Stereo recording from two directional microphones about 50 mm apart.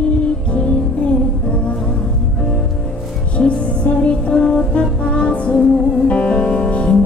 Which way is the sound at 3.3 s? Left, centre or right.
Left.